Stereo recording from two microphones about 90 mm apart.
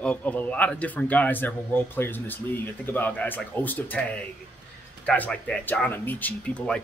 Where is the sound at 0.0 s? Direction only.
15° left (ahead or behind).